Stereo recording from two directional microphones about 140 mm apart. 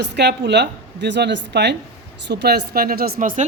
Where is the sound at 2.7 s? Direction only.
90° right; by 3.4 s 75° right (ahead or behind).